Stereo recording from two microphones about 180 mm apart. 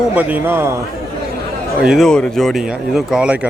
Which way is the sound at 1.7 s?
5° right (ahead or behind).